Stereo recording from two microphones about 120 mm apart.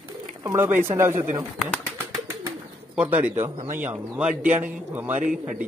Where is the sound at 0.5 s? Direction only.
20° right (ahead or behind).